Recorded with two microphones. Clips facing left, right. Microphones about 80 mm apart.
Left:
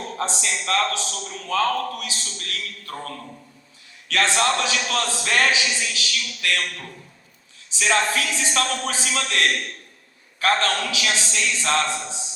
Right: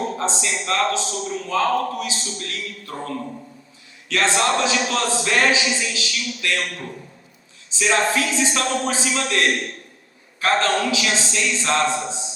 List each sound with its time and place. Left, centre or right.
0.2 s a man's voice: right